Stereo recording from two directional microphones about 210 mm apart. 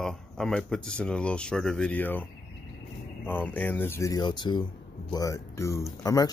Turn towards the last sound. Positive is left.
turn(degrees=15)  # may be behind; listen again after turning